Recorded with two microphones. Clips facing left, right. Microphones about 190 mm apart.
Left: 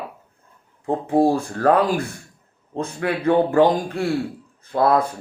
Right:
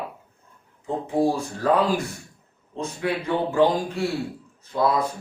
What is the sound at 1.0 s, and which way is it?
Speech, 55° left (ahead or behind).